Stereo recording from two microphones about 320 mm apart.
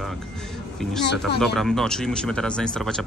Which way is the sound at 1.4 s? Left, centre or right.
Centre.